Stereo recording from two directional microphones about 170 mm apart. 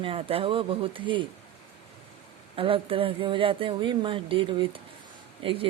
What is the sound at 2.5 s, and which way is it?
Speech, 30° right (ahead or behind).